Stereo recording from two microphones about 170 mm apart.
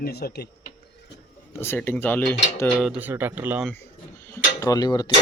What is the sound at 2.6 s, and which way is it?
Cutlery, 5° left (ahead or behind).